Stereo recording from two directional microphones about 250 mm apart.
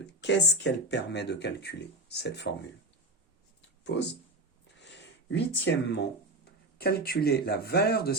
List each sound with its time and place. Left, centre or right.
0.2 s speech: left
3.9 s speech: left
4.8 s a sound: left
6.4 s speech: left